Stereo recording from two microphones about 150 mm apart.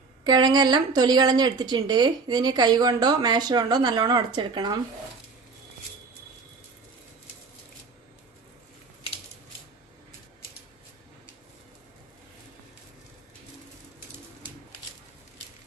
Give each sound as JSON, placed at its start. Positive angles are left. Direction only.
{"t": 0.3, "sound": "speech", "side_deg": -30}